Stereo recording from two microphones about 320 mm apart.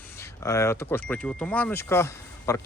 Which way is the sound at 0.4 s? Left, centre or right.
Centre.